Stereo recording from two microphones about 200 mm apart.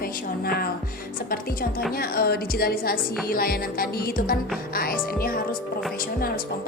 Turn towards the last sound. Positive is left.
turn(degrees=45)  # may be behind; listen again after turning